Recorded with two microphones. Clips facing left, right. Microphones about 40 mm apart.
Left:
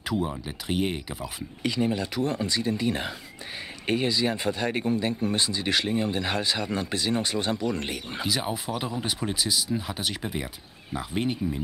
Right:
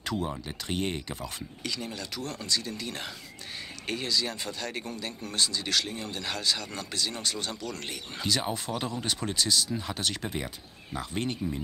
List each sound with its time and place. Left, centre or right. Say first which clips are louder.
0.0 s speech: left 3 dB; centre
1.6 s speech: left 10 dB; left